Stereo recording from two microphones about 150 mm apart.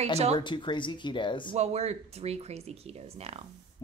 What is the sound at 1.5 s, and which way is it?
Speech, 45° right (ahead or behind).